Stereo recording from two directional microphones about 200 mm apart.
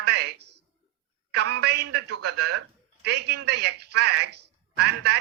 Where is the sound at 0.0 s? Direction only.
55° right (ahead or behind).